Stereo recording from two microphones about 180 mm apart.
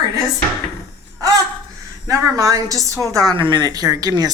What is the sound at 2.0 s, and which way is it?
Speech, 20° right (ahead or behind).